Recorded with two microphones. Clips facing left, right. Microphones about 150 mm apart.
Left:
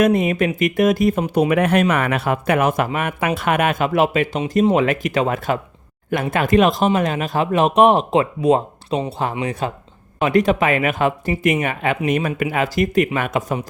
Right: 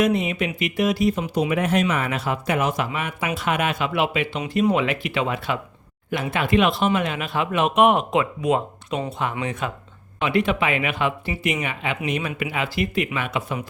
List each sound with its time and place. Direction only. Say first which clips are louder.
0.0 s speech: left 5 dB; 50° left (ahead or behind)